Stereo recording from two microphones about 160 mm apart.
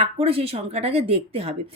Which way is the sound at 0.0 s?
35° right (ahead or behind).